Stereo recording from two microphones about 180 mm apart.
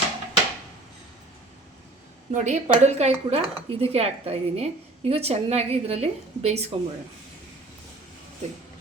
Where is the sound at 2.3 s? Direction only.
40° right (ahead or behind).